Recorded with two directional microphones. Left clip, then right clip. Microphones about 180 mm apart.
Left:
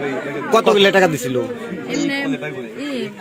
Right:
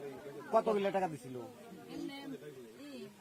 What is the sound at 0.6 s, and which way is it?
Speech, 45° right (ahead or behind).